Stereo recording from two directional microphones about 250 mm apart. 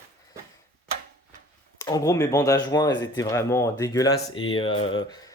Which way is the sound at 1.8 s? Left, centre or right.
Centre.